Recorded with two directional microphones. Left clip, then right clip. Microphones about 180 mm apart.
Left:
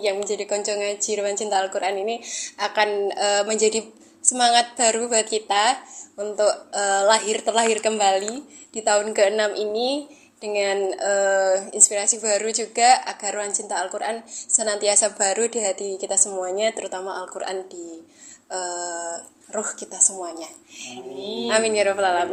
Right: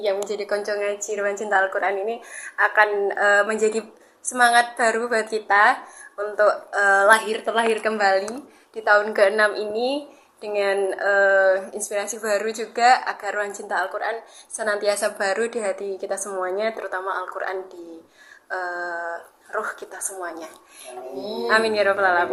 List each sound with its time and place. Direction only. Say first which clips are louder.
0.4 s speech: right 2 dB; 25° left (ahead or behind)
21.5 s speech: right 1 dB; 30° left (ahead or behind)